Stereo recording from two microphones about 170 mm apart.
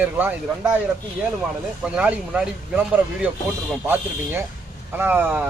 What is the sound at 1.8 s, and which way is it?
Speech, 5° right (ahead or behind).